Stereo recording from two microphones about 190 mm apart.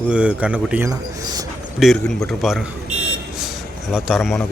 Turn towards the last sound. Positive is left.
turn(degrees=0)  # may be behind; listen again after turning